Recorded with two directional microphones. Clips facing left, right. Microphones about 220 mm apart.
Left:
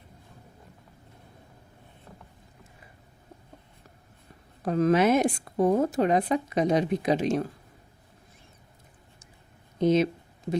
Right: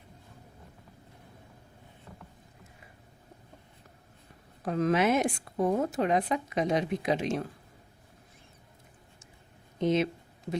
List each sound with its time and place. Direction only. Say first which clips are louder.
4.6 s a woman's voice: left 4 dB; 35° left (ahead or behind)
9.8 s speech: left 4 dB; 40° left (ahead or behind)